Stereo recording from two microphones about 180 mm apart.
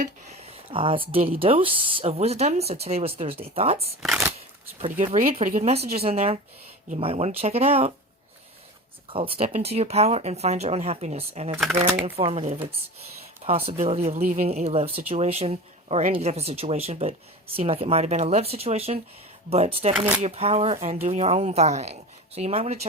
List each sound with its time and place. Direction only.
0.0 s speech: 35° right (ahead or behind)
4.0 s speech: centre (ahead or behind)
4.8 s speech: 45° right (ahead or behind)
9.0 s speech: 30° right (ahead or behind)